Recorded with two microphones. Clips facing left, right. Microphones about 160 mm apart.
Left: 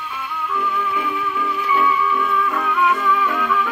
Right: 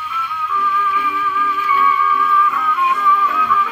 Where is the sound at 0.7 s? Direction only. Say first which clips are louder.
Right 2 dB; 35° left (ahead or behind).